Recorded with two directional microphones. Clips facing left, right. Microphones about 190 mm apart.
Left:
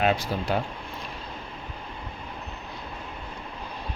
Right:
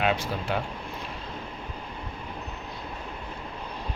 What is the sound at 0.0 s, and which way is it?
Speech, 40° left (ahead or behind).